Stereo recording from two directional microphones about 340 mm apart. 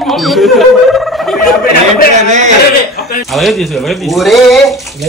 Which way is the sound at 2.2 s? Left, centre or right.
Right.